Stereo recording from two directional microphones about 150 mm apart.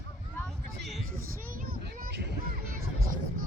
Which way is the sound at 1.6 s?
85° right.